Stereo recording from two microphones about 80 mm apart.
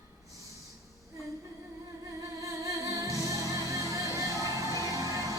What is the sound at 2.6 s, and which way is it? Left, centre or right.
Music, right.